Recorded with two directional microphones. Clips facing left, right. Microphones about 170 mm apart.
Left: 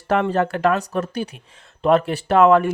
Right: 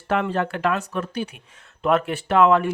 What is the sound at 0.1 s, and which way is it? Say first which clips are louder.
Speech: left 4 dB; 40° left (ahead or behind).